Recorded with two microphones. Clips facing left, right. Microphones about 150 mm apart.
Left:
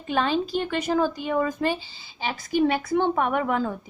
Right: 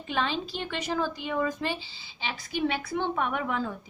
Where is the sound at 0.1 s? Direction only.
45° left (ahead or behind).